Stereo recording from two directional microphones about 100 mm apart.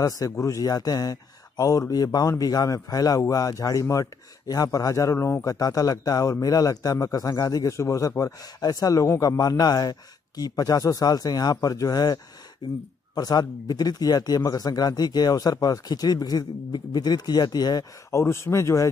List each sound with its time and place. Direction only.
0.0 s a man's voice: 35° left (ahead or behind)
18.1 s speech: 25° left (ahead or behind)